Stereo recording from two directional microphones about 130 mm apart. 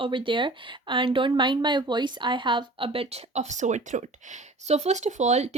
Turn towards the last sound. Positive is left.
turn(degrees=-60)  # may be behind; listen again after turning